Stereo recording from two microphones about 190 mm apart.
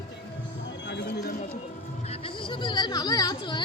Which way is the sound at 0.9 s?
60° left (ahead or behind).